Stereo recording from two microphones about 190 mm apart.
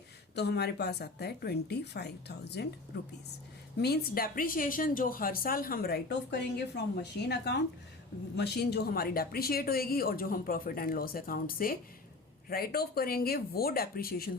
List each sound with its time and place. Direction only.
0.3 s a woman's voice: 60° left (ahead or behind)
3.8 s a woman's voice: 55° left (ahead or behind)